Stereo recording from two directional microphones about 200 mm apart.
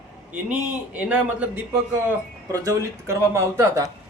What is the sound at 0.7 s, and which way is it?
Speech, 5° right (ahead or behind).